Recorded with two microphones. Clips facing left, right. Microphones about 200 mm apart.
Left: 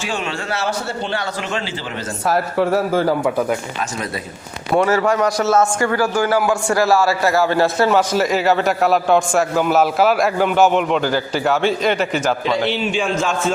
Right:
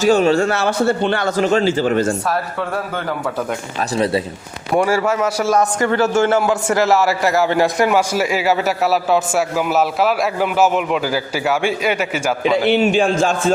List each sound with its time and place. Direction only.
0.0 s a man's voice: 40° right (ahead or behind)
2.2 s speech: 25° left (ahead or behind)
3.2 s speech: 10° left (ahead or behind)
3.9 s speech: 30° right (ahead or behind)
4.7 s a man's voice: 10° right (ahead or behind)
5.9 s a man's voice: 25° right (ahead or behind); by 12.5 s 10° right (ahead or behind)
12.6 s a man's voice: 55° right (ahead or behind)